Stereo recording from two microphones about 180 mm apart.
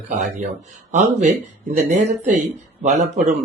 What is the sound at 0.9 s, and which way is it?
A man's voice, 40° right (ahead or behind).